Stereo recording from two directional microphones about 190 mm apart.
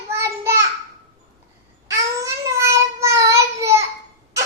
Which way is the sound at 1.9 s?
15° right (ahead or behind).